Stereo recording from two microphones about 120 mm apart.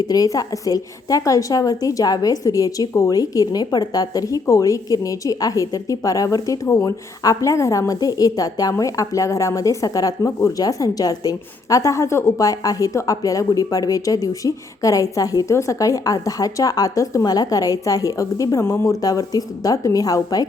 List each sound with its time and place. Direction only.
0.1 s a woman's voice: 30° left (ahead or behind)